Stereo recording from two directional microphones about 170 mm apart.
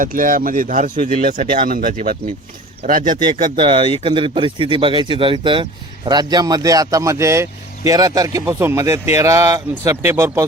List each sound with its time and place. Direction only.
0.0 s speech: 55° right (ahead or behind)
3.6 s speech: 30° right (ahead or behind)